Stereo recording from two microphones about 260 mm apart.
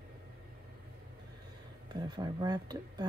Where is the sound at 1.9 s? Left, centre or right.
Centre.